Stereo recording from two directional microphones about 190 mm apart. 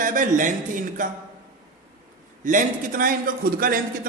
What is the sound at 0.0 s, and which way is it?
A man's voice, 45° right (ahead or behind).